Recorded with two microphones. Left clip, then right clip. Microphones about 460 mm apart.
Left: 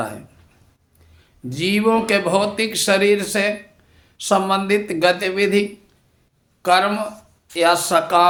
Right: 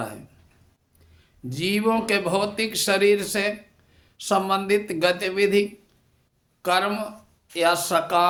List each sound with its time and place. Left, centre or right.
1.2 s speech: right